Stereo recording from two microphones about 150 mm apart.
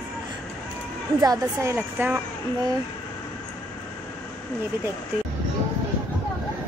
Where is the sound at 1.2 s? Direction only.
20° right (ahead or behind).